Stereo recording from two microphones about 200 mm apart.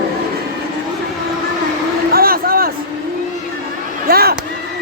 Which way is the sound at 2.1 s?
45° right (ahead or behind).